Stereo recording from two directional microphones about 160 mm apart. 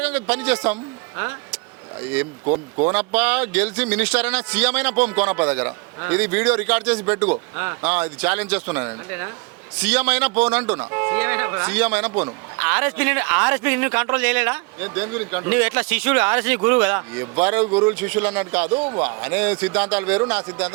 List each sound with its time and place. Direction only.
0.0 s a man's voice: 10° right (ahead or behind)
2.4 s speech: 35° right (ahead or behind)
2.9 s speech: 10° right (ahead or behind)
18.7 s speech: 30° right (ahead or behind)
19.0 s speech: 10° right (ahead or behind)